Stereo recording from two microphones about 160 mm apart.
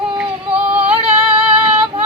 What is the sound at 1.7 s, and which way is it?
Female singing, 35° right (ahead or behind).